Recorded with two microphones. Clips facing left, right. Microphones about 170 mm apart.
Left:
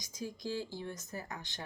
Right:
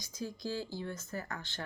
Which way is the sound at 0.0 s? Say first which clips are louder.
Right 1 dB; 20° left (ahead or behind).